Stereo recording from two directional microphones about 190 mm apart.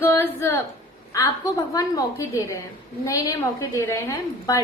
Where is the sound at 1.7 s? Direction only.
20° left (ahead or behind).